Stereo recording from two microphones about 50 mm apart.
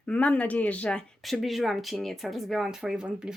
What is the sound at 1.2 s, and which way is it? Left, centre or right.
Speech, centre.